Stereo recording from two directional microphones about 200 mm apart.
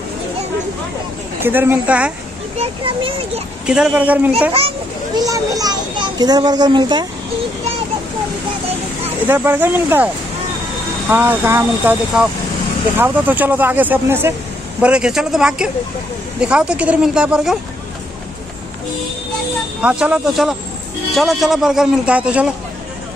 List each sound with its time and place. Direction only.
1.4 s speech: 10° right (ahead or behind)
2.6 s a child's voice: 30° right (ahead or behind)
3.6 s speech: 5° right (ahead or behind)
4.6 s a child's voice: 25° right (ahead or behind)
9.0 s a man's voice: 10° right (ahead or behind)
19.8 s a man's voice: 5° right (ahead or behind)